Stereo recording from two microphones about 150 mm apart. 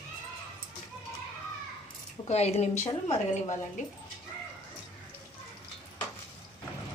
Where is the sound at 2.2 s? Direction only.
45° left (ahead or behind).